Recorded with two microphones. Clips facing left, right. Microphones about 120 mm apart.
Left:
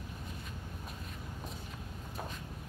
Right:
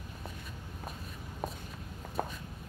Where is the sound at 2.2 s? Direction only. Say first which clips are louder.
Right 8 dB; 50° right (ahead or behind).